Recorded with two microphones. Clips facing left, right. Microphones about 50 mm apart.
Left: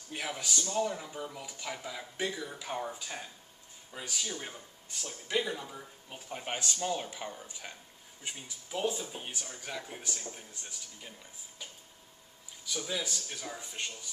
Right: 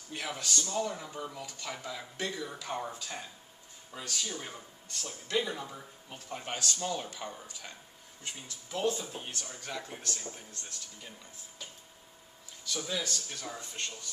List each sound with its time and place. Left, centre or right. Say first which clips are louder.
0.1 s speech: even; centre
5.4 s speech: even; centre
6.4 s speech: left 1 dB; centre
12.6 s speech: right 1 dB; centre